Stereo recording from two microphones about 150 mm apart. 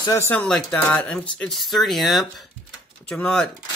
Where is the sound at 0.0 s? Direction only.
20° left (ahead or behind).